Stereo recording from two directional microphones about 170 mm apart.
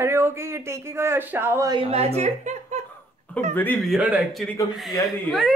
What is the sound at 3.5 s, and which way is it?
Speech, 10° left (ahead or behind).